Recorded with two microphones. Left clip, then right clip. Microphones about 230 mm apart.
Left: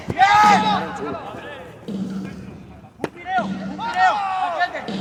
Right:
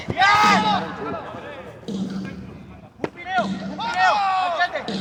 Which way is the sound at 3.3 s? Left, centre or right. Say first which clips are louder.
Even; right.